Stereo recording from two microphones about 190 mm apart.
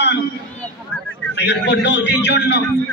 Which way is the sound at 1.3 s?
65° left (ahead or behind).